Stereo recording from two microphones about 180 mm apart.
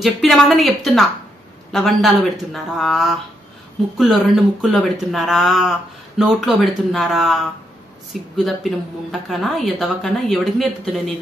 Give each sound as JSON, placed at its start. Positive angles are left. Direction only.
{"t": 0.0, "sound": "speech", "side_deg": 0}